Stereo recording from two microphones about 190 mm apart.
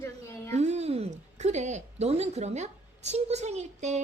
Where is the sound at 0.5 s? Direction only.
35° right (ahead or behind).